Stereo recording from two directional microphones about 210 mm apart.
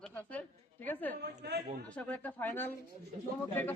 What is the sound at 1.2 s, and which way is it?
Speech, 50° right (ahead or behind).